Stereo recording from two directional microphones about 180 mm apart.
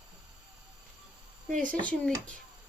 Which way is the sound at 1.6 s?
5° left (ahead or behind).